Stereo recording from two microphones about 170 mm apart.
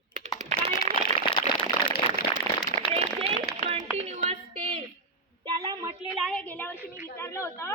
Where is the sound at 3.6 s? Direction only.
40° right (ahead or behind).